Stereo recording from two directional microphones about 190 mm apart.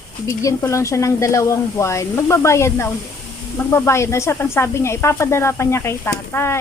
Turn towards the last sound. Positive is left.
turn(degrees=15)  # may be behind; listen again after turning